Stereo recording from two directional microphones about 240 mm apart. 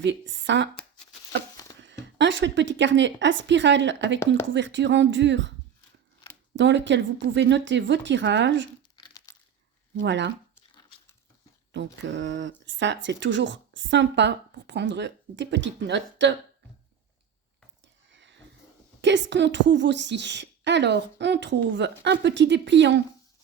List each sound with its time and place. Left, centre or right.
0.0 s speech: right
1.8 s speech: right
6.6 s speech: right
9.0 s crumpling: centre
10.0 s speech: right
10.5 s crumpling: centre
12.0 s speech: right
18.1 s a sound: right
19.0 s speech: right